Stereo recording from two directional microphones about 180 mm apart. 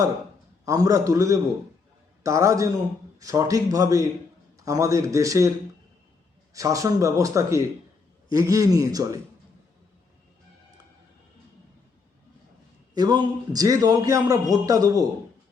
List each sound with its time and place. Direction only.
0.6 s a man's voice: 20° right (ahead or behind)
6.5 s a man's voice: 20° right (ahead or behind)
12.9 s a man's voice: 25° right (ahead or behind)